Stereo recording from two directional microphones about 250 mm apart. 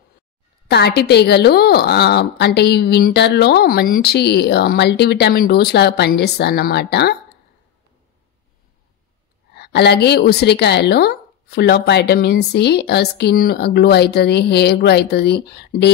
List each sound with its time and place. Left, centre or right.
0.7 s a woman's voice: left
9.6 s a woman's voice: left